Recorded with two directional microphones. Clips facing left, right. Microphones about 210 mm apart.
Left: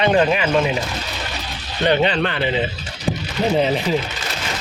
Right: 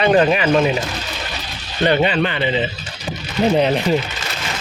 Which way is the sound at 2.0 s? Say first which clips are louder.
Right 1 dB; 5° right (ahead or behind).